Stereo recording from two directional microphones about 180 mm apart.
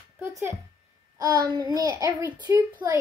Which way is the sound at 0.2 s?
15° right (ahead or behind).